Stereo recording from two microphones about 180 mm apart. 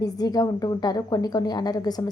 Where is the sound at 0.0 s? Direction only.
20° left (ahead or behind).